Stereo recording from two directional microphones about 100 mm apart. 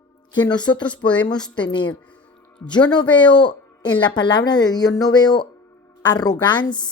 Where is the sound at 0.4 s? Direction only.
45° left (ahead or behind).